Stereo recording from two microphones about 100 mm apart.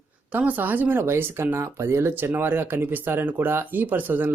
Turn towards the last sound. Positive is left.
turn(degrees=-20)  # may be behind; listen again after turning